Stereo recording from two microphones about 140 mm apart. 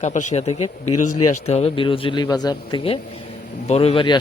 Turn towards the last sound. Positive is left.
turn(degrees=35)  # may be behind; listen again after turning